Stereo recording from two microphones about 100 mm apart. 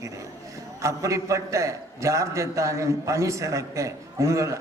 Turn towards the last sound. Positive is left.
turn(degrees=-30)  # may be behind; listen again after turning